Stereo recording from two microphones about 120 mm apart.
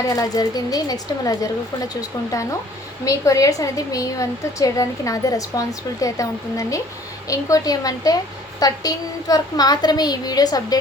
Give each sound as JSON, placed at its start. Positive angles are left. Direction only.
{"t": 0.1, "sound": "a woman's voice", "side_deg": 30}